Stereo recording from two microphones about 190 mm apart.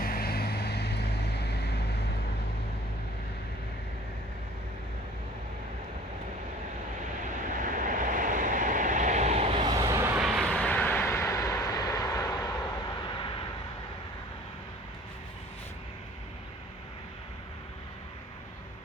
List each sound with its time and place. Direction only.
0.0 s vehicle: 50° left (ahead or behind)
7.6 s vehicle: 45° right (ahead or behind)
9.7 s vehicle: 15° right (ahead or behind)
10.2 s vehicle: centre (ahead or behind); by 13.4 s 25° left (ahead or behind)